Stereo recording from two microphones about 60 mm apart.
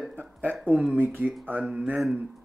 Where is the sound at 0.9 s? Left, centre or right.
Right.